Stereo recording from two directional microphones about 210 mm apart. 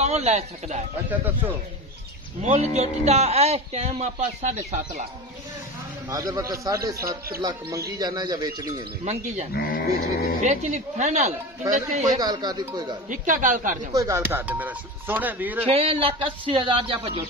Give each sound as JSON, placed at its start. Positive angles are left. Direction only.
{"t": 0.0, "sound": "a man's voice", "side_deg": -30}
{"t": 2.4, "sound": "a man's voice", "side_deg": -30}
{"t": 6.0, "sound": "speech", "side_deg": -15}
{"t": 9.0, "sound": "a man's voice", "side_deg": -30}
{"t": 9.5, "sound": "a sound", "side_deg": 45}
{"t": 10.4, "sound": "a man's voice", "side_deg": -35}
{"t": 12.2, "sound": "speech", "side_deg": -20}
{"t": 13.1, "sound": "a man's voice", "side_deg": -40}
{"t": 13.9, "sound": "speech", "side_deg": -15}
{"t": 15.7, "sound": "speech", "side_deg": -25}